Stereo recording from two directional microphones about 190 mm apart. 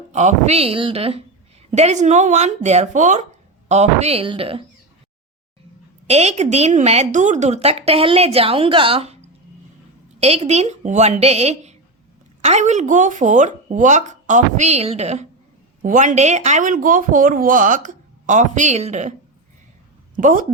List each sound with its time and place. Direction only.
0.1 s a woman's voice: 35° right (ahead or behind)
6.1 s speech: 35° right (ahead or behind)
10.2 s speech: 35° right (ahead or behind)
20.1 s speech: 45° right (ahead or behind)